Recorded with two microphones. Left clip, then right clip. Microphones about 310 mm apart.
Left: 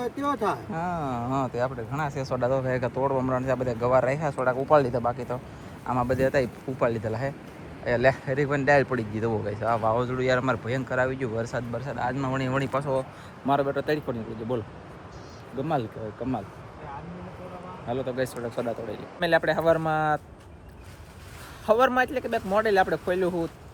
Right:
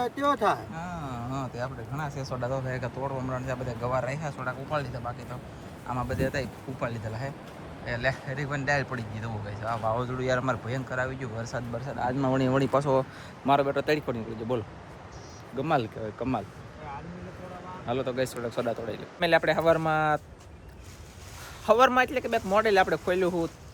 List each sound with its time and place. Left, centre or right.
0.0 s speech: centre; by 13.1 s right
13.4 s speech: centre
17.8 s speech: centre
21.7 s speech: centre